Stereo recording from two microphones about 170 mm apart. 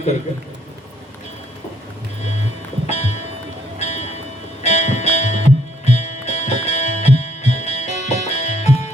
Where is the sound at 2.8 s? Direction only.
40° left (ahead or behind).